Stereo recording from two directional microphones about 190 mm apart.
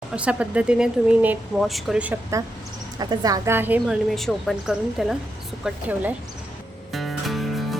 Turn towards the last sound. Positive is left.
turn(degrees=0)  # may be behind; listen again after turning